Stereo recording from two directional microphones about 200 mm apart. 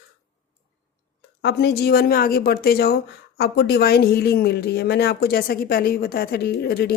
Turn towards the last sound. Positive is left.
turn(degrees=55)  # may be behind; listen again after turning